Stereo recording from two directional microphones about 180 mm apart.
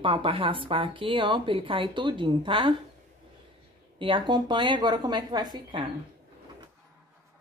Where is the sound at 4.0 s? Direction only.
30° right (ahead or behind).